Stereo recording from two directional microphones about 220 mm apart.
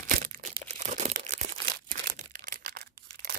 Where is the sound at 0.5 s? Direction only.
30° right (ahead or behind).